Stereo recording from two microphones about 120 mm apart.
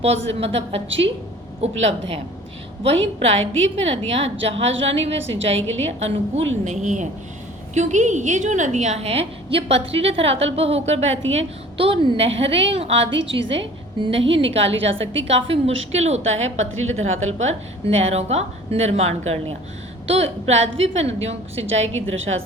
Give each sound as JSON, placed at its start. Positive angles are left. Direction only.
{"t": 0.0, "sound": "a woman's voice", "side_deg": -60}